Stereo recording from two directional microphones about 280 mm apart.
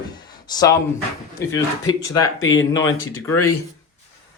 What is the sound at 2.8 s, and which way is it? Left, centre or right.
Speech, left.